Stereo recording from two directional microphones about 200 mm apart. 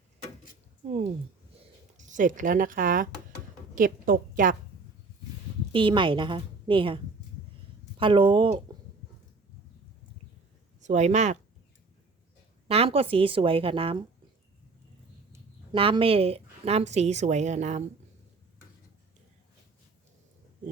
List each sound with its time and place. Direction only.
2.0 s a woman's voice: 40° right (ahead or behind)
5.7 s a woman's voice: 25° right (ahead or behind)
10.8 s speech: 35° right (ahead or behind)
12.6 s a woman's voice: 30° right (ahead or behind)
15.7 s a woman's voice: 25° right (ahead or behind)